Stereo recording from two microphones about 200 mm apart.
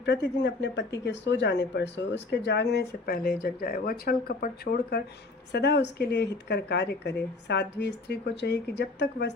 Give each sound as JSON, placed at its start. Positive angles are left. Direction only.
{"t": 0.0, "sound": "speech", "side_deg": 60}